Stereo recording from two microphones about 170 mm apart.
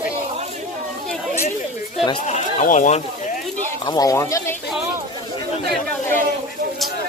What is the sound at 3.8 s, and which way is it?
Speech, 25° left (ahead or behind).